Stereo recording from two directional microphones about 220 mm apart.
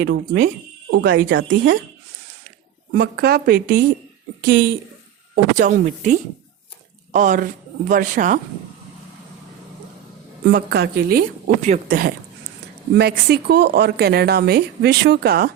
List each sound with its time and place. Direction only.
0.9 s speech: 55° right (ahead or behind)
3.0 s a woman's voice: 45° right (ahead or behind)
10.5 s a woman's voice: 45° right (ahead or behind)